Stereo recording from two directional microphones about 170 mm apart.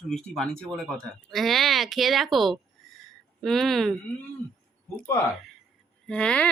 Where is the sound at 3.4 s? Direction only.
Centre (ahead or behind).